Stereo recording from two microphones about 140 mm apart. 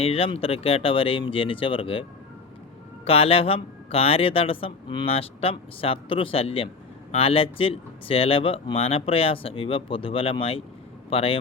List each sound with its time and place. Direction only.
0.0 s speech: 45° left (ahead or behind)